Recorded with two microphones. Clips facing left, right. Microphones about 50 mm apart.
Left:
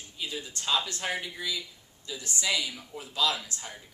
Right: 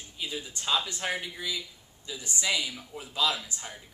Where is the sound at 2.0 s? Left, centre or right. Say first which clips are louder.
Even; right.